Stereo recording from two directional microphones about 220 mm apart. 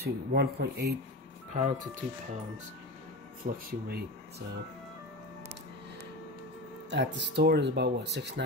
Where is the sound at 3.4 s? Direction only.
40° right (ahead or behind).